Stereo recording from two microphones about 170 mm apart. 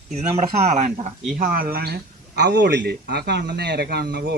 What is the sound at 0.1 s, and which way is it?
Speech, 40° right (ahead or behind).